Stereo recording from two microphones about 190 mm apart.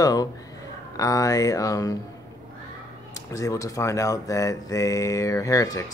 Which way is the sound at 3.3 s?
15° left (ahead or behind).